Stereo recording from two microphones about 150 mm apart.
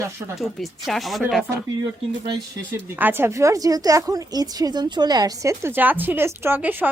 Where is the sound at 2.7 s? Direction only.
15° right (ahead or behind).